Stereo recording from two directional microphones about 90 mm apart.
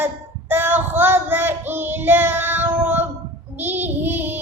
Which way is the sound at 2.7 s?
20° right (ahead or behind).